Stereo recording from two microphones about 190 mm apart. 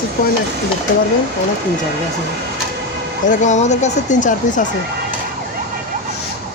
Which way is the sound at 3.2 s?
40° left (ahead or behind).